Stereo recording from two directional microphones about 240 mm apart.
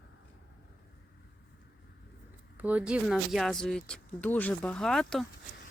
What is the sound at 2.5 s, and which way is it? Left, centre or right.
Speech, centre.